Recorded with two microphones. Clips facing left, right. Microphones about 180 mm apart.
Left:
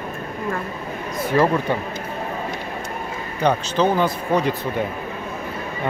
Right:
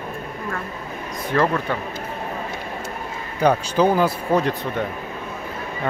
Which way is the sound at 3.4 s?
5° right (ahead or behind).